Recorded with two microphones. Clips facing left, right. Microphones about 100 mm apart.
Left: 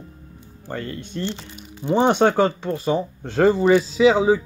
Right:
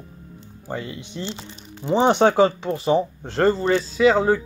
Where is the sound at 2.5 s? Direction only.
20° right (ahead or behind).